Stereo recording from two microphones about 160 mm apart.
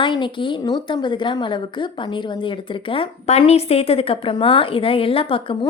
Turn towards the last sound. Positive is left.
turn(degrees=35)  # may be behind; listen again after turning